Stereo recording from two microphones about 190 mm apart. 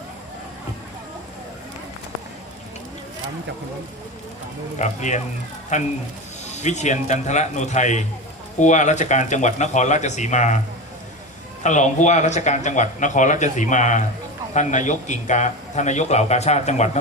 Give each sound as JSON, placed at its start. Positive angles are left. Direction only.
{"t": 4.8, "sound": "a man's voice", "side_deg": 40}
{"t": 11.6, "sound": "a man's voice", "side_deg": 40}